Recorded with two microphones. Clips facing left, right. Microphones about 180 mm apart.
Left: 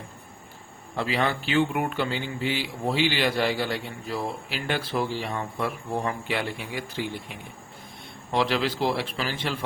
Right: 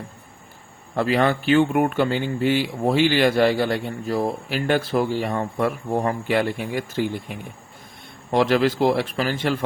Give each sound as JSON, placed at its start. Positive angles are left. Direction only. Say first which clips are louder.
{"t": 0.9, "sound": "speech", "louder": "right 6 dB", "side_deg": -50}